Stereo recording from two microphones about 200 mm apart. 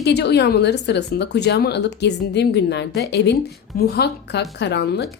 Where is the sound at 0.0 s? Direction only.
55° left (ahead or behind).